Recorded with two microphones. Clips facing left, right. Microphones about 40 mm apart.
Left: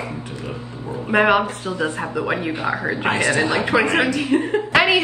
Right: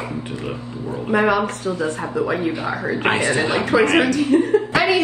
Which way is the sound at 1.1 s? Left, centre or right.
Left.